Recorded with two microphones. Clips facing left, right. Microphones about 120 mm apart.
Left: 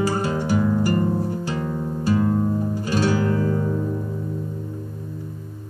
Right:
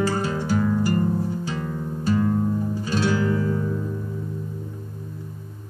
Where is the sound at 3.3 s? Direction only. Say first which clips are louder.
Left 2 dB; 45° left (ahead or behind).